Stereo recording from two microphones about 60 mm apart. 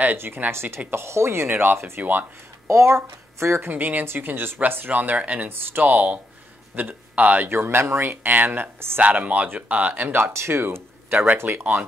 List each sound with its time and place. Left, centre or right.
0.0 s speech: right
2.7 s speech: right
3.7 s speech: right
5.5 s speech: right
10.3 s speech: right